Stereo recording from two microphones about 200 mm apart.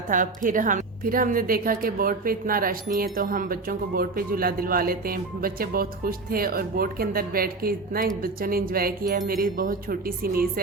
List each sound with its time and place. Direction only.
0.1 s speech: 40° right (ahead or behind)